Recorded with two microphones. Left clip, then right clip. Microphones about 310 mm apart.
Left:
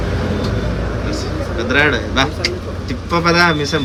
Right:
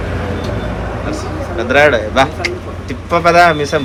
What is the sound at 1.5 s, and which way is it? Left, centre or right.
A man's voice, centre.